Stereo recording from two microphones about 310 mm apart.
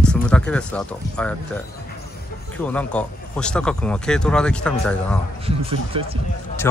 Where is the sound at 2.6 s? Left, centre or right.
Centre.